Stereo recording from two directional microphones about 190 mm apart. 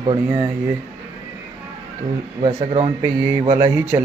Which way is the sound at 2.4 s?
30° right (ahead or behind).